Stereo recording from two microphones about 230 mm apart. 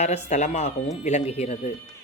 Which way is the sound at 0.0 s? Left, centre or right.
Left.